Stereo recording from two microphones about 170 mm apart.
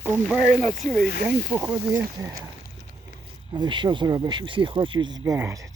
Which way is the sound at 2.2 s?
20° right (ahead or behind).